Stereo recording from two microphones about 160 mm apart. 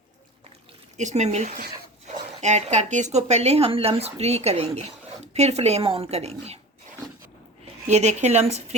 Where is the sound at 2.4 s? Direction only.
45° right (ahead or behind).